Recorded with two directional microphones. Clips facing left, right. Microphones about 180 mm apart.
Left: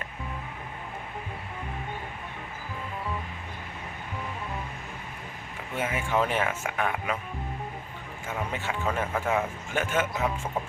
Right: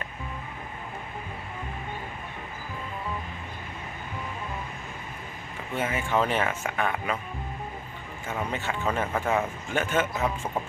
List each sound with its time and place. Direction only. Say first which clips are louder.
5.7 s a man's voice: right 1 dB; 10° left (ahead or behind)
8.3 s a man's voice: right 1 dB; 10° left (ahead or behind)